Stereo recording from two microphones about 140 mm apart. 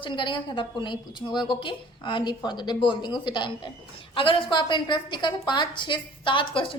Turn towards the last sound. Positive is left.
turn(degrees=35)  # may be behind; listen again after turning